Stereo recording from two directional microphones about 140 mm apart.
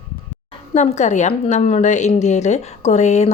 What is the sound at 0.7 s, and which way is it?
A woman's voice, 55° left (ahead or behind).